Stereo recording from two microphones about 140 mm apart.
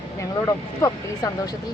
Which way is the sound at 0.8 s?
25° left (ahead or behind).